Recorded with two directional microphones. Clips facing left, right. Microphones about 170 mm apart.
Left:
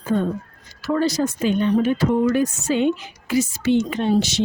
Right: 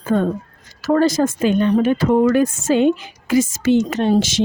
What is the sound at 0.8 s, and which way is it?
Speech, 45° right (ahead or behind).